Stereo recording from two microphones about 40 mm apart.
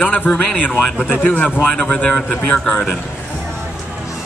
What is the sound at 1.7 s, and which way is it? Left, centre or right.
A man's voice, centre.